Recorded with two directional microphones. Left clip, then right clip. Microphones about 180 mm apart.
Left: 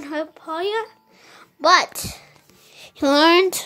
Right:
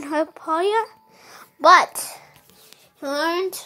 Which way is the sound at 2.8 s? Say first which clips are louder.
Left 9 dB; 40° left (ahead or behind).